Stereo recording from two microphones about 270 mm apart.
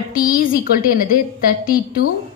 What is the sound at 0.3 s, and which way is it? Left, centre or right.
A woman's voice, left.